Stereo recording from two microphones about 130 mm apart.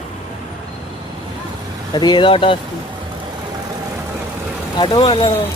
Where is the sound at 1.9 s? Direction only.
35° left (ahead or behind).